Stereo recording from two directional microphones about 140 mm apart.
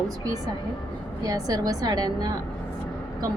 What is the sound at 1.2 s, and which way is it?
A woman's voice, 25° right (ahead or behind).